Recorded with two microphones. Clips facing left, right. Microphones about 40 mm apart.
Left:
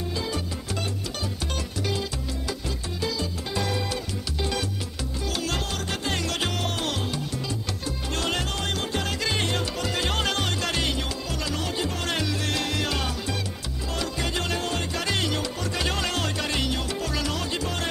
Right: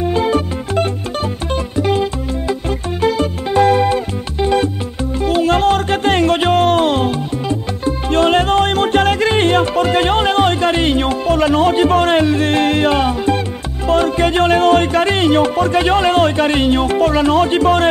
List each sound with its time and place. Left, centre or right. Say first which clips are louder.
0.0 s music: right 15 dB; right